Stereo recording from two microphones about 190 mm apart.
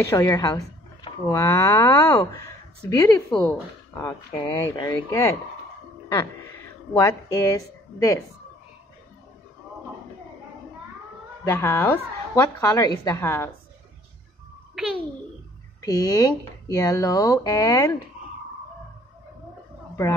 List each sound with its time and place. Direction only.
0.0 s speech: 15° left (ahead or behind)
6.9 s speech: 20° left (ahead or behind)
11.4 s speech: 10° left (ahead or behind)
15.8 s speech: 20° left (ahead or behind)